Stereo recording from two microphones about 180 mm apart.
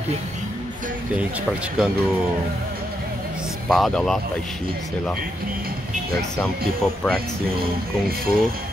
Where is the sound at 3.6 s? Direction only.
Centre (ahead or behind).